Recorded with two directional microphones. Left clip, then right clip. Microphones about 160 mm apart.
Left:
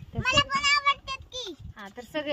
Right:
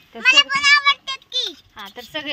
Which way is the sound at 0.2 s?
Centre (ahead or behind).